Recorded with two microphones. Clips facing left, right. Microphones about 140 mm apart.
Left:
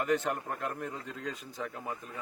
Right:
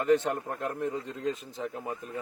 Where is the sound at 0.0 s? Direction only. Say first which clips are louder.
Right 5 dB; 30° right (ahead or behind).